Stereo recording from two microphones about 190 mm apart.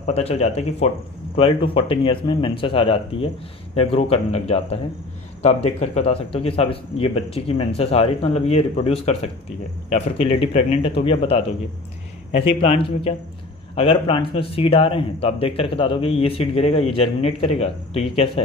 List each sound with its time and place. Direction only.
0.0 s a man's voice: 35° left (ahead or behind)